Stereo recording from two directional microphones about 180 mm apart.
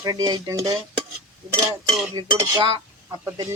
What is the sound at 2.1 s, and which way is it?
Speech, 25° right (ahead or behind).